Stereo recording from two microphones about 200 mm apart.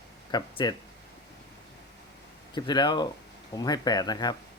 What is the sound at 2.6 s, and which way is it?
Speech, 20° left (ahead or behind).